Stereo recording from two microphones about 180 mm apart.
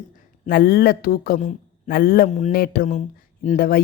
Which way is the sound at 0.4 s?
55° left (ahead or behind).